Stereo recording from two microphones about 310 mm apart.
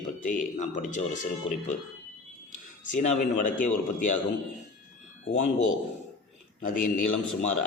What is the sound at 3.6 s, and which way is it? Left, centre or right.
Speech, left.